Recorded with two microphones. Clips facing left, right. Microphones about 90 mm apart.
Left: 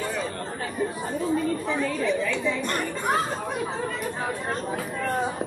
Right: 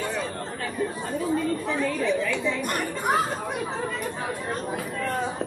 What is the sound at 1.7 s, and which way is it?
Speech, centre (ahead or behind).